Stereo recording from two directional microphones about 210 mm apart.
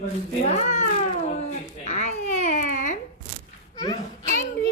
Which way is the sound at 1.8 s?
30° left (ahead or behind).